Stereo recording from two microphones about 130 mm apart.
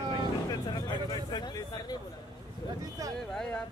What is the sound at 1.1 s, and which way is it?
Speech, 30° left (ahead or behind).